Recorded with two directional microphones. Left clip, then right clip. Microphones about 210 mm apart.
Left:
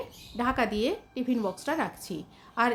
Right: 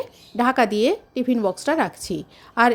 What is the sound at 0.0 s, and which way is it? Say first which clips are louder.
A woman's voice: right 9 dB; 35° right (ahead or behind).